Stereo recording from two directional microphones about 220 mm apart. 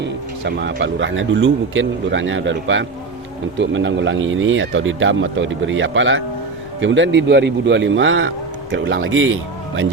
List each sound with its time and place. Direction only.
0.0 s a man's voice: 50° right (ahead or behind)